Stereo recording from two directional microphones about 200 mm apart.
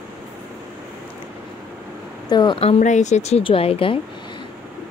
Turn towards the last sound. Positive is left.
turn(degrees=30)  # may be behind; listen again after turning